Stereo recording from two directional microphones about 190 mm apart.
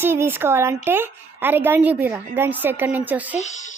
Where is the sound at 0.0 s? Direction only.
10° right (ahead or behind).